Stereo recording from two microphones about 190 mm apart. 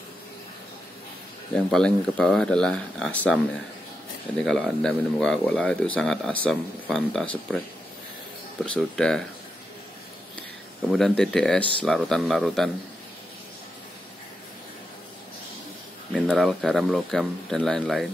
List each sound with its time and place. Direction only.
1.5 s speech: 5° left (ahead or behind)
4.5 s speech: centre (ahead or behind)
8.7 s speech: 5° left (ahead or behind)
10.9 s speech: centre (ahead or behind)
16.1 s speech: centre (ahead or behind)